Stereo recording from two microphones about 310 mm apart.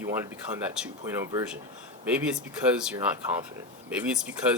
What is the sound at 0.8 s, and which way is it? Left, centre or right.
Speech, centre.